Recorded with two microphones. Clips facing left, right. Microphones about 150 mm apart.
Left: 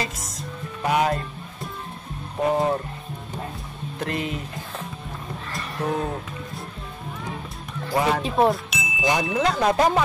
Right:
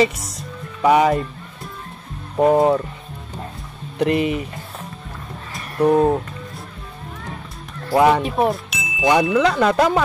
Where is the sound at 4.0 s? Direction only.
75° right (ahead or behind).